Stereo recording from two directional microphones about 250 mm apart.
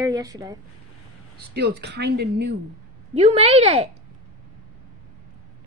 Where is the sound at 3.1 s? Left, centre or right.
Right.